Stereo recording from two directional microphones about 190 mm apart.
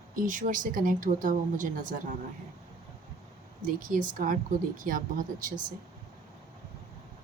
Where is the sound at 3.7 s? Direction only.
45° right (ahead or behind).